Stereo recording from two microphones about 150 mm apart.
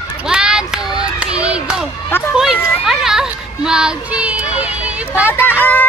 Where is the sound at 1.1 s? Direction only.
5° right (ahead or behind).